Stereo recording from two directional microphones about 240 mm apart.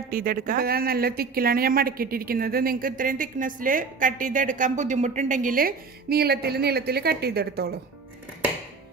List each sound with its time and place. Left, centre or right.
0.1 s speech: right